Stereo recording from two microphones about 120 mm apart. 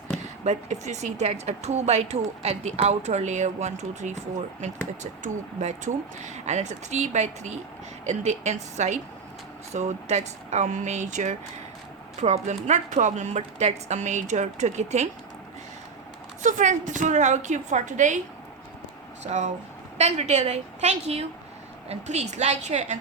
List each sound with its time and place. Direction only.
0.4 s a woman's voice: 70° right (ahead or behind)
5.2 s a woman's voice: 90° right
12.2 s a woman's voice: 75° right (ahead or behind)
16.4 s a woman's voice: 90° right
19.2 s speech: 80° right
20.0 s a woman's voice: 65° right (ahead or behind)